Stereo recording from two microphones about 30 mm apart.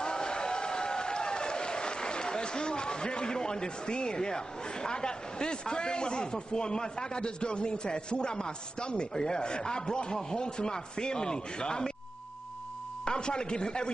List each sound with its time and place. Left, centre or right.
0.0 s speech: left
13.0 s speech: left